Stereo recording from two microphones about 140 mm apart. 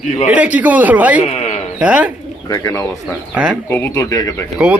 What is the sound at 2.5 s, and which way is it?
Speech, 20° left (ahead or behind).